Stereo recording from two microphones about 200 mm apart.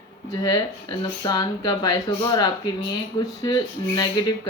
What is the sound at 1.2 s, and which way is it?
Speech, 20° left (ahead or behind).